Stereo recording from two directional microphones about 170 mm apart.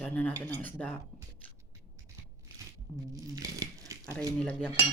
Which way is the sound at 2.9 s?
20° right (ahead or behind).